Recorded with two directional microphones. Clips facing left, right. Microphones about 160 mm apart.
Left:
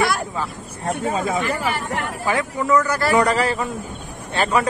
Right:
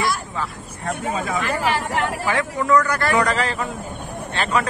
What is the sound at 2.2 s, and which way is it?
Speech, 20° left (ahead or behind).